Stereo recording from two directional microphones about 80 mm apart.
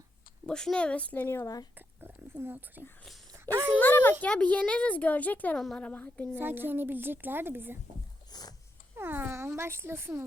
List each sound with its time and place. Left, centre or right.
0.4 s a woman's voice: centre
1.4 s speech: left
2.0 s a sound: right
3.8 s a child's voice: left
5.5 s a woman's voice: centre
5.8 s a child's voice: centre
6.3 s a woman's voice: right
8.3 s a sound: left
9.0 s speech: right